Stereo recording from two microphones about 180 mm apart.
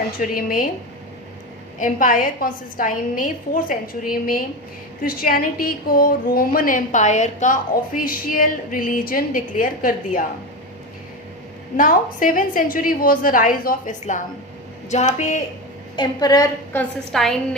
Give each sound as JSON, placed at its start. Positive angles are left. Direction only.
{"t": 0.2, "sound": "a woman's voice", "side_deg": 50}
{"t": 1.8, "sound": "a woman's voice", "side_deg": 45}
{"t": 7.9, "sound": "a woman's voice", "side_deg": 50}
{"t": 11.8, "sound": "a woman's voice", "side_deg": 50}
{"t": 16.0, "sound": "a woman's voice", "side_deg": 20}
{"t": 16.7, "sound": "a woman's voice", "side_deg": 0}